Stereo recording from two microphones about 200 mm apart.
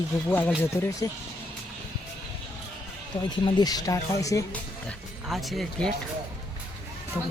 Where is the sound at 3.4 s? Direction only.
20° left (ahead or behind).